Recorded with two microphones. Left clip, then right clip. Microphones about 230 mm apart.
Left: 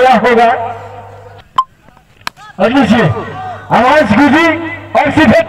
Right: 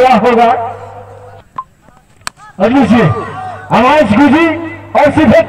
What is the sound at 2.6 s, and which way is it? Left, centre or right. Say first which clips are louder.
Speech: even; left.